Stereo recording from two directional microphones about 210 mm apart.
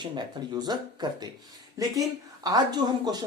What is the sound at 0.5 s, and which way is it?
Speech, 20° right (ahead or behind).